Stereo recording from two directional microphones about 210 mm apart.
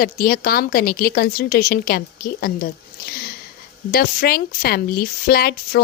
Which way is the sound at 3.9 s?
45° left (ahead or behind).